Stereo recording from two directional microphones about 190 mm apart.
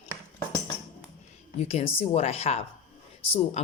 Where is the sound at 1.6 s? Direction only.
30° left (ahead or behind).